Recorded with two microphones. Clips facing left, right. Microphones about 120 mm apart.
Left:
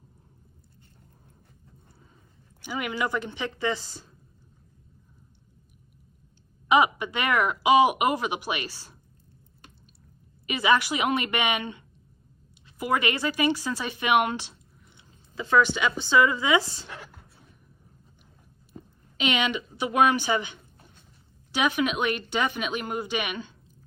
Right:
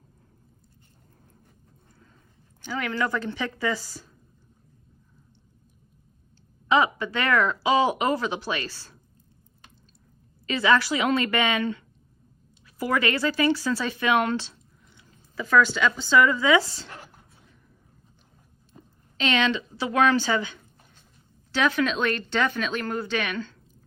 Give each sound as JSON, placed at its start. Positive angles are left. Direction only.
{"t": 2.6, "sound": "speech", "side_deg": 15}
{"t": 6.7, "sound": "speech", "side_deg": 15}
{"t": 10.4, "sound": "speech", "side_deg": 15}
{"t": 19.1, "sound": "speech", "side_deg": 15}